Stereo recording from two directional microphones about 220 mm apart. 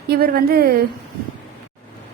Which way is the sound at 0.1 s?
45° right (ahead or behind).